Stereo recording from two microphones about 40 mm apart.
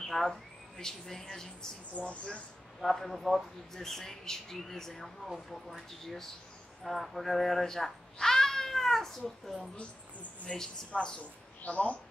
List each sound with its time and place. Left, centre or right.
0.0 s speech: centre
2.0 s speech: left
2.8 s a child's voice: centre
10.5 s speech: left